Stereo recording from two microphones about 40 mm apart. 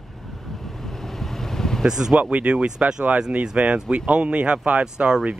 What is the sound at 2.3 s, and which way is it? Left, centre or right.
Speech, right.